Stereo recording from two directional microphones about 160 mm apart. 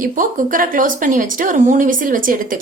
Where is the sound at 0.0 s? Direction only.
55° right (ahead or behind).